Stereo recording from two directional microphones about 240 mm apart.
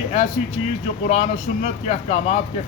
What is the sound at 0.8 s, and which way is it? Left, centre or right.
Speech, left.